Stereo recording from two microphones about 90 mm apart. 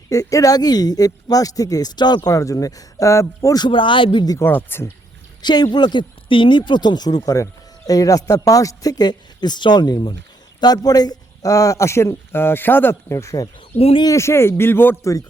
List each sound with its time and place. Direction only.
0.1 s speech: 40° left (ahead or behind)
2.3 s a man's voice: 40° left (ahead or behind)
3.6 s speech: 65° left (ahead or behind)
4.4 s speech: 25° left (ahead or behind)
5.4 s a man's voice: 55° left (ahead or behind); by 13.5 s 35° left (ahead or behind)
13.7 s speech: 90° left
14.0 s speech: 35° left (ahead or behind)